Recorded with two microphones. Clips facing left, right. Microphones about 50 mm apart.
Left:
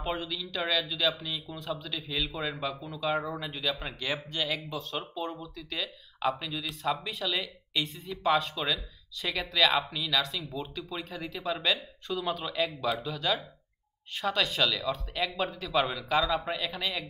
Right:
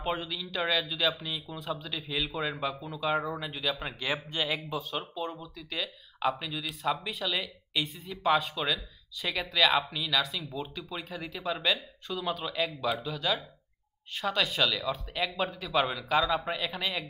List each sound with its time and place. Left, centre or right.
0.0 s speech: centre